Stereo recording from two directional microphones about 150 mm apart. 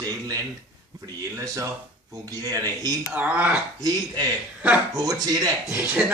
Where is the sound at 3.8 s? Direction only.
25° right (ahead or behind).